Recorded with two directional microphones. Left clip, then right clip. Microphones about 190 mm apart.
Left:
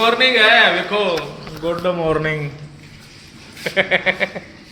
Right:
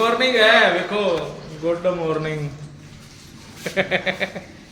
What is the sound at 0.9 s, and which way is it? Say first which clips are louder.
Speech: left 3 dB; 30° left (ahead or behind).